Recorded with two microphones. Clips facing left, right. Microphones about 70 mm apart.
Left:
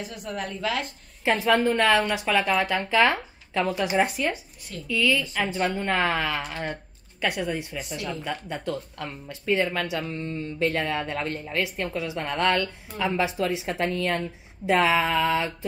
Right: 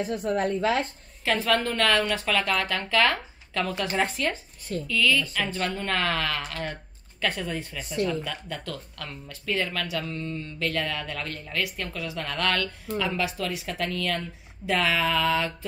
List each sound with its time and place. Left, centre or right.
0.0 s a woman's voice: right
1.2 s a woman's voice: centre